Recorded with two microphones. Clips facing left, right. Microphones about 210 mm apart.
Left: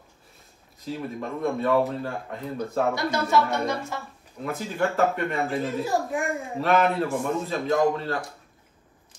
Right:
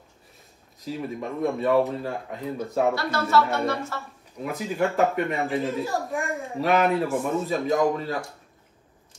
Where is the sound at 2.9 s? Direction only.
15° left (ahead or behind).